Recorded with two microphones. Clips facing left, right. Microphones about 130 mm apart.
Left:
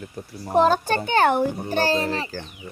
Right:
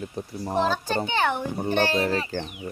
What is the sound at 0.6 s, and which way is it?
A child's voice, 50° left (ahead or behind).